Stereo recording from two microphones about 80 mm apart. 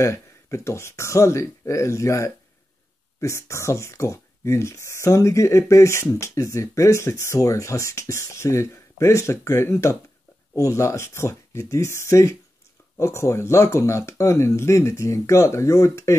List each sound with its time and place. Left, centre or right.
0.0 s speech: left